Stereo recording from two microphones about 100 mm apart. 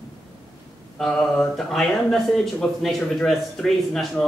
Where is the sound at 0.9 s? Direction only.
5° left (ahead or behind).